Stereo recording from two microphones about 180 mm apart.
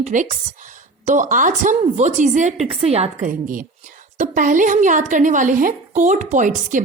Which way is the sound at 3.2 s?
50° right (ahead or behind).